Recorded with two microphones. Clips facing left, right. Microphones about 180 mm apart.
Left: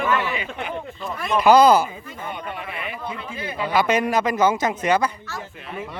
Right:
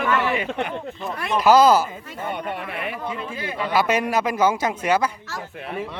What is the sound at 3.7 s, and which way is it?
A man's voice, 5° right (ahead or behind).